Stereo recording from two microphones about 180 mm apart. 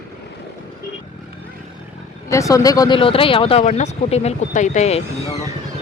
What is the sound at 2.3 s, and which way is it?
Speech, 20° left (ahead or behind).